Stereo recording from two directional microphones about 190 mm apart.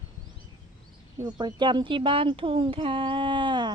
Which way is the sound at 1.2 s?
20° right (ahead or behind).